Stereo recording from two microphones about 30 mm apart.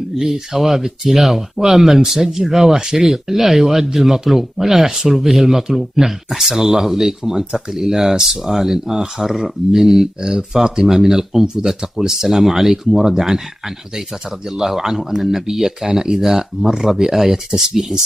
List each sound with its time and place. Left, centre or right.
0.1 s speech: centre
8.7 s speech: centre
10.2 s speech: centre
12.1 s speech: centre
14.9 s speech: centre